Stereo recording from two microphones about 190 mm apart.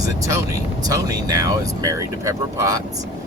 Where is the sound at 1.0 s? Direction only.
20° right (ahead or behind).